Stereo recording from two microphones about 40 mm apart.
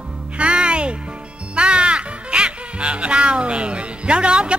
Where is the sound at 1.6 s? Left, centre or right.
Right.